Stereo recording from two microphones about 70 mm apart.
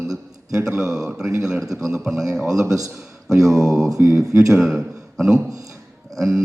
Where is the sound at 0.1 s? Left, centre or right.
Centre.